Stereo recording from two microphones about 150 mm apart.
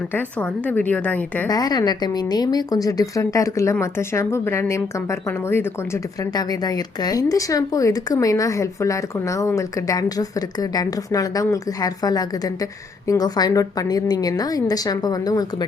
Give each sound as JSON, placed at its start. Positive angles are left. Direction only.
{"t": 0.1, "sound": "a woman's voice", "side_deg": 10}
{"t": 1.5, "sound": "a woman's voice", "side_deg": 25}
{"t": 6.3, "sound": "a woman's voice", "side_deg": 25}